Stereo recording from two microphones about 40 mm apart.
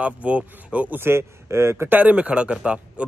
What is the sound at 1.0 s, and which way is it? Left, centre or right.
Speech, right.